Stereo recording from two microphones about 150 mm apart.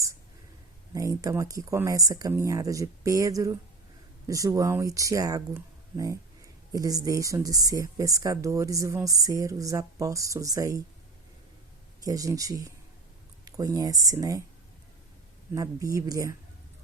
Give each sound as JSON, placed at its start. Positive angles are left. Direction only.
{"t": 0.9, "sound": "speech", "side_deg": -20}
{"t": 12.0, "sound": "speech", "side_deg": -25}
{"t": 15.5, "sound": "speech", "side_deg": -20}